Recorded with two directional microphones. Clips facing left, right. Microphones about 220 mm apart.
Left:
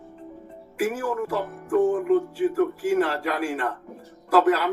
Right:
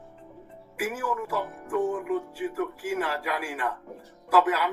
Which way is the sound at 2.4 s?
5° right (ahead or behind).